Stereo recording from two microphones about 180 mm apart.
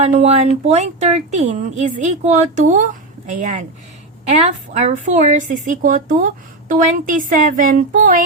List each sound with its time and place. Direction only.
0.0 s a woman's voice: 40° right (ahead or behind)